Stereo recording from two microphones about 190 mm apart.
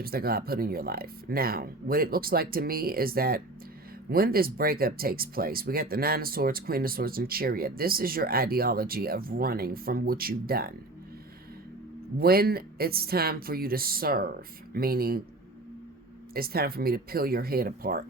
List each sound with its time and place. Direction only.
0.0 s speech: 55° right (ahead or behind)
12.1 s speech: 55° right (ahead or behind)
16.3 s speech: 55° right (ahead or behind)